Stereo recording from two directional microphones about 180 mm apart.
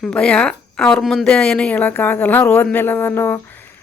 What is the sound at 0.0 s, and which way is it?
Speech, 5° left (ahead or behind).